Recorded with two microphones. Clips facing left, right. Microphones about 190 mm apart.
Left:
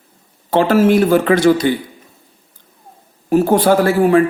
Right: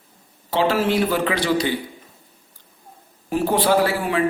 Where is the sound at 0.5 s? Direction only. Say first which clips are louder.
Left 7 dB; 50° left (ahead or behind).